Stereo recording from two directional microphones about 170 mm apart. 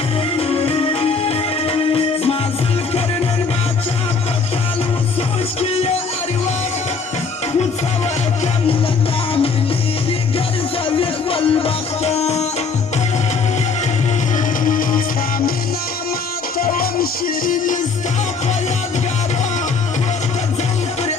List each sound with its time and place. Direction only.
0.3 s music: 35° left (ahead or behind)
5.5 s music: 35° left (ahead or behind)
10.9 s music: 35° left (ahead or behind)
14.3 s music: 50° left (ahead or behind)
16.6 s music: 60° left (ahead or behind)